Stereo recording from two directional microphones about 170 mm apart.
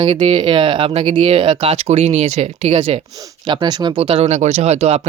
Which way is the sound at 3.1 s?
25° right (ahead or behind).